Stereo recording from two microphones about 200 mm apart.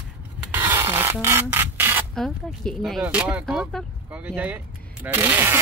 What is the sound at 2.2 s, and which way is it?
Speech, centre (ahead or behind).